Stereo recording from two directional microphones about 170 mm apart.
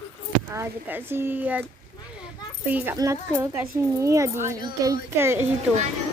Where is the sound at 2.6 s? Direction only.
10° right (ahead or behind).